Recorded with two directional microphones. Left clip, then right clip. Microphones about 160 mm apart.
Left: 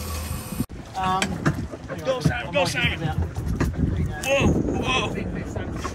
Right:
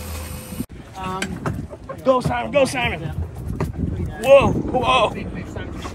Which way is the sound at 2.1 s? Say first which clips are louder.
Right 7 dB; 35° right (ahead or behind).